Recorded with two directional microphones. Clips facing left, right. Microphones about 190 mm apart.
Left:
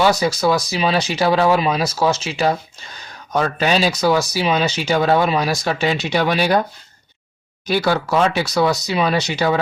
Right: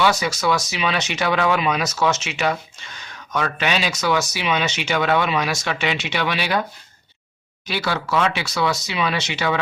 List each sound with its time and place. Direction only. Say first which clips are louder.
0.0 s speech: left 4 dB; 35° left (ahead or behind)
7.7 s speech: left 6 dB; 40° left (ahead or behind)